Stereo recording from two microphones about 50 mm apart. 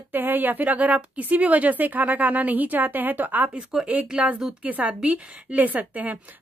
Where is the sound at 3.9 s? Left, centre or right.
Right.